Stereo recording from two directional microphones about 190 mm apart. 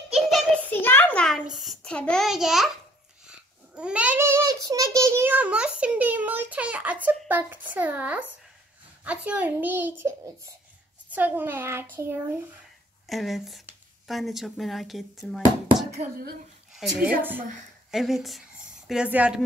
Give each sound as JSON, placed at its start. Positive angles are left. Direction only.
{"t": 0.7, "sound": "a child's voice", "side_deg": 10}
{"t": 13.0, "sound": "speech", "side_deg": 0}
{"t": 16.0, "sound": "speech", "side_deg": -35}
{"t": 16.7, "sound": "a child's voice", "side_deg": -5}